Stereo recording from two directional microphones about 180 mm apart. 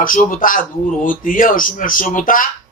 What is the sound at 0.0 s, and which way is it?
Speech, 50° left (ahead or behind).